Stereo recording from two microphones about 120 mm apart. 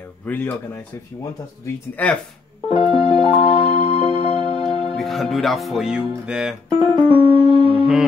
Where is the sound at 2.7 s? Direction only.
55° left (ahead or behind).